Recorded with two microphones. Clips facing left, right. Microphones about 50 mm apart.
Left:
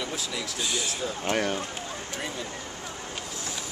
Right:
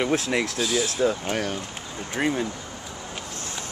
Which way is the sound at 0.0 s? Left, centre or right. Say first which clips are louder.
Right 10 dB; right.